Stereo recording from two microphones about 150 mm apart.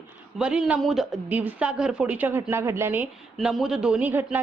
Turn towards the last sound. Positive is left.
turn(degrees=-10)  # may be behind; listen again after turning